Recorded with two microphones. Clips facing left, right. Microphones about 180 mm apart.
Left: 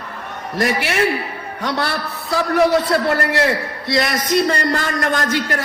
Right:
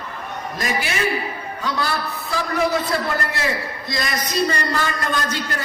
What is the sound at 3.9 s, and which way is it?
Speech, 70° left (ahead or behind).